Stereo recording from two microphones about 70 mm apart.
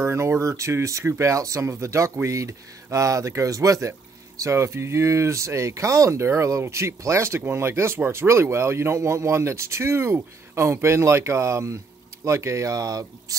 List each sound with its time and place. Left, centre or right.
0.0 s speech: right
4.4 s speech: right